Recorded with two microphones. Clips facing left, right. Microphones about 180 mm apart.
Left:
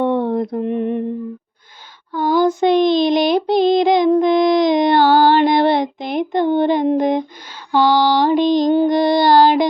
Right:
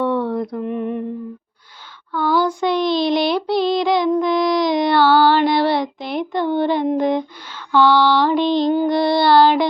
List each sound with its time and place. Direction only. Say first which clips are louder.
0.3 s child singing: left 3 dB; 25° left (ahead or behind)
2.3 s child singing: left 5 dB; 20° left (ahead or behind)
6.6 s a sound: left 1 dB; 20° left (ahead or behind)